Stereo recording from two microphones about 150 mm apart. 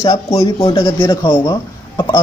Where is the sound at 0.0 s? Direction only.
20° left (ahead or behind).